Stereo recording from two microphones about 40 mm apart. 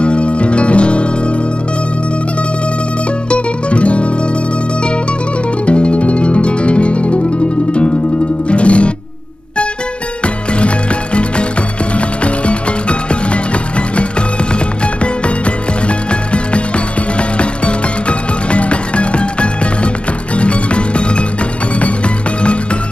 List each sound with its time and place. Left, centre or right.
0.0 s music: left
3.3 s music: left
5.7 s music: left
13.1 s music: left
16.1 s music: left